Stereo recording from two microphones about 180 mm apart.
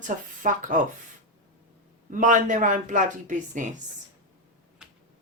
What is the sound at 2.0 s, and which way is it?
Speech, 45° right (ahead or behind).